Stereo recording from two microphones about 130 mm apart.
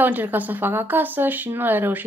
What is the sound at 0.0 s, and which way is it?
Speech, 15° right (ahead or behind).